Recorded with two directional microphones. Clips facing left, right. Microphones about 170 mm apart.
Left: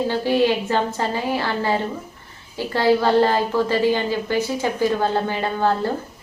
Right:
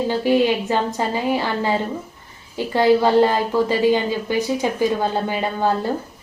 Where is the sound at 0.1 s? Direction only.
15° right (ahead or behind).